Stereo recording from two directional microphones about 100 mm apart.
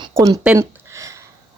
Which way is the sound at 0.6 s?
30° right (ahead or behind).